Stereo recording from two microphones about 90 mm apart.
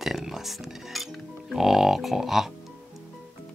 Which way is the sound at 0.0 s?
5° right (ahead or behind).